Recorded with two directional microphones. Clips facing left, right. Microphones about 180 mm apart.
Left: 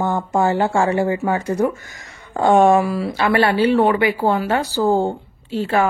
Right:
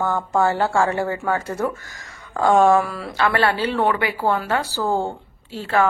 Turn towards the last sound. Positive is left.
turn(degrees=15)  # may be behind; listen again after turning